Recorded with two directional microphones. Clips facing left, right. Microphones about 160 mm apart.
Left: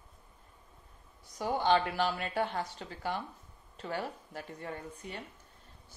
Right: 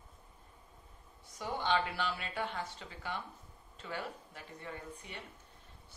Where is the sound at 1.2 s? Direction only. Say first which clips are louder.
Left 6 dB; 40° left (ahead or behind).